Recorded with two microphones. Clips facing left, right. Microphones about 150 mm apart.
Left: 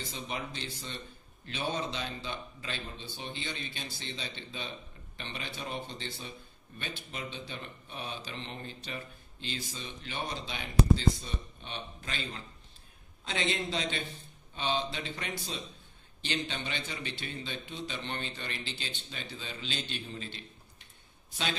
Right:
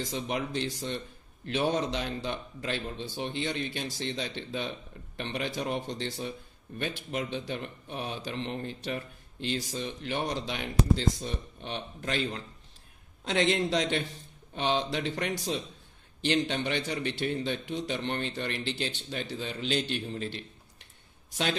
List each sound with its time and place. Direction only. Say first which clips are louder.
0.1 s a man's voice: right 7 dB; 65° right (ahead or behind)